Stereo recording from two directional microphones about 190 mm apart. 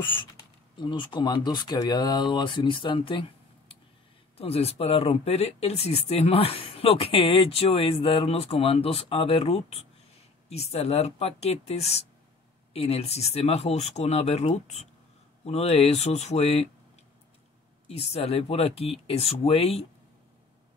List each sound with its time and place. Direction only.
0.0 s speech: 25° left (ahead or behind)
17.8 s speech: 30° left (ahead or behind)